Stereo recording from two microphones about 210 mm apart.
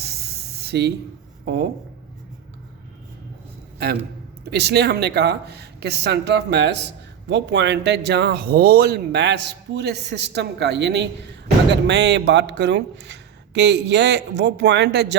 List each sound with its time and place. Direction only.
0.6 s speech: 50° right (ahead or behind)
4.5 s speech: 50° right (ahead or behind)